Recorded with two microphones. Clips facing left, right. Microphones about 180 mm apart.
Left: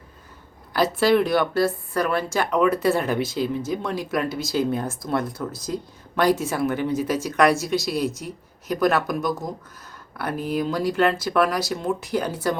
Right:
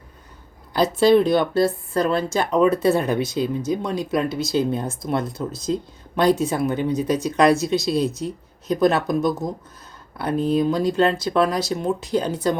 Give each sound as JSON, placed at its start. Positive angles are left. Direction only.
{"t": 0.7, "sound": "speech", "side_deg": -20}